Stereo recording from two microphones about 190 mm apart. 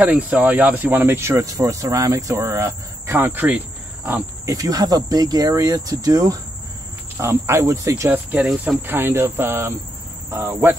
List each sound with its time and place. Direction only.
0.0 s speech: 5° right (ahead or behind)